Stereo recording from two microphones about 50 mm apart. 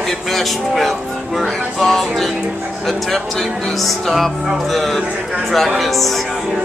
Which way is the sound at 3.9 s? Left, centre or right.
Centre.